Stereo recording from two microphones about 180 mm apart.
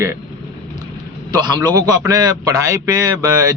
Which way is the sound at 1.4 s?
20° right (ahead or behind).